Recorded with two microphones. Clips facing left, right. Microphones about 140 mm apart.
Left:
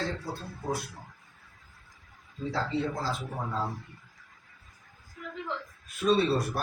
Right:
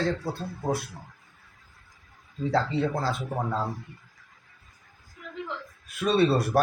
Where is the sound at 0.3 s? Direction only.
60° right (ahead or behind).